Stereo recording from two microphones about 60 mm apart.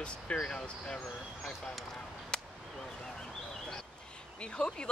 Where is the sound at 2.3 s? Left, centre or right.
Centre.